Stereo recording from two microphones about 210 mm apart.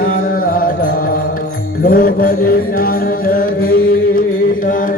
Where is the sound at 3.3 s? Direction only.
45° left (ahead or behind).